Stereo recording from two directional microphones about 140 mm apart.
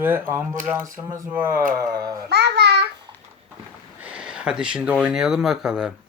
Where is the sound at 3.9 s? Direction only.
10° right (ahead or behind).